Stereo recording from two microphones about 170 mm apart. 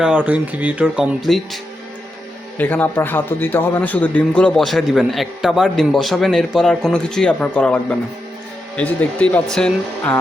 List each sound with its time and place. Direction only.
0.0 s speech: 10° right (ahead or behind)
2.6 s a man's voice: 10° left (ahead or behind)